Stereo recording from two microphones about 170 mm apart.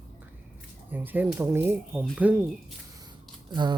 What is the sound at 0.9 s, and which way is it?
Speech, 10° right (ahead or behind).